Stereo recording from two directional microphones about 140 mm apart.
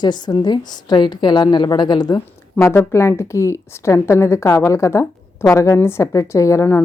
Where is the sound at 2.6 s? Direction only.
20° left (ahead or behind).